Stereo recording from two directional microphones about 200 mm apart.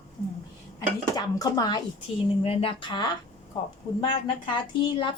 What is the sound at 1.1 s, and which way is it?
Speech, 20° left (ahead or behind).